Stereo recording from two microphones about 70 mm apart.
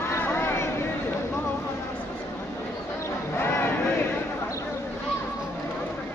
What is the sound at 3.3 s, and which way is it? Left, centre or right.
Crowd, left.